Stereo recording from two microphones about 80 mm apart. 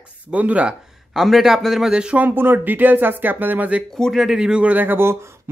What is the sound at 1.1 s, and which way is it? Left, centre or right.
Speech, centre.